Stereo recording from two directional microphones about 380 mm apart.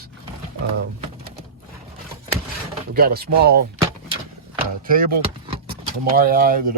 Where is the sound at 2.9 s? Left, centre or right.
Right.